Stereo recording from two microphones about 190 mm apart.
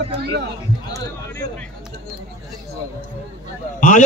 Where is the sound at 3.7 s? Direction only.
40° left (ahead or behind).